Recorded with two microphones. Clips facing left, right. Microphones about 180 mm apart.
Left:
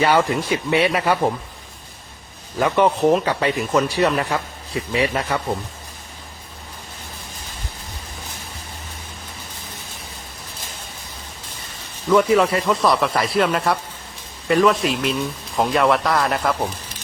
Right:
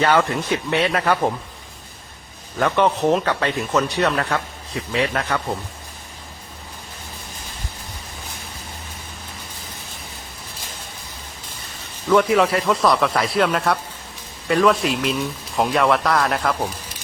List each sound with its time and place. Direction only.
0.0 s speech: 5° left (ahead or behind)
2.6 s speech: 5° left (ahead or behind)
12.0 s speech: centre (ahead or behind)